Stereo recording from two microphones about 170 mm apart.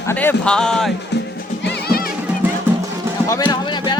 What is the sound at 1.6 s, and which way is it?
Music, 75° left (ahead or behind).